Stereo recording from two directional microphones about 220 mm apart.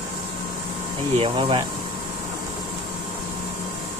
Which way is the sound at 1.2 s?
25° right (ahead or behind).